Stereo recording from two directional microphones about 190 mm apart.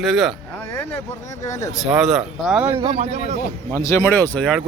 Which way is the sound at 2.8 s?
30° right (ahead or behind).